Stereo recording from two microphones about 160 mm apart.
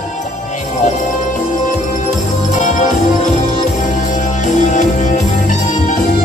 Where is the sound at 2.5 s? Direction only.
50° left (ahead or behind).